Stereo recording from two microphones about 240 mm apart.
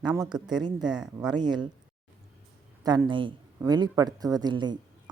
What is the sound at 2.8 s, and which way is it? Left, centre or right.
Speech, centre.